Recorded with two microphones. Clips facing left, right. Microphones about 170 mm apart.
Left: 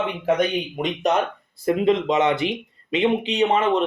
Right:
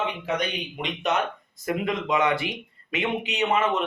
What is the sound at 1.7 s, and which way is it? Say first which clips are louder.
Speech: left 7 dB; 25° left (ahead or behind).